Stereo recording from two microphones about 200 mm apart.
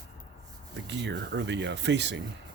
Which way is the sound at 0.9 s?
60° right (ahead or behind).